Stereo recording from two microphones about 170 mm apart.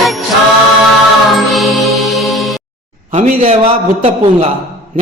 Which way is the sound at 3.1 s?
40° right (ahead or behind).